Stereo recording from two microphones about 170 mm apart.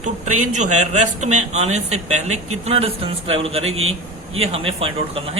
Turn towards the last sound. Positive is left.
turn(degrees=-35)  # may be behind; listen again after turning